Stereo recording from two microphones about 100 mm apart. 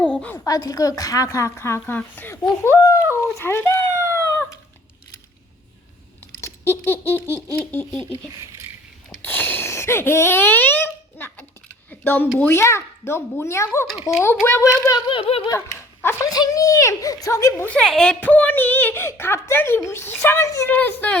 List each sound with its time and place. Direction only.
0.0 s a sound: 10° left (ahead or behind)
0.4 s a woman's voice: 35° left (ahead or behind); by 2.4 s 20° left (ahead or behind)
2.8 s speech: 30° left (ahead or behind)
6.4 s a sound: 25° left (ahead or behind)
7.5 s speech: 15° left (ahead or behind)
8.3 s speech: 35° right (ahead or behind)
9.0 s a sound: 20° left (ahead or behind)
11.9 s a woman's voice: 20° left (ahead or behind); by 15.4 s 65° left (ahead or behind)
15.5 s dog: 25° left (ahead or behind)
16.2 s a woman's voice: 40° left (ahead or behind)
17.7 s speech: 5° left (ahead or behind); by 20.7 s 30° left (ahead or behind)
20.7 s speech: 15° left (ahead or behind)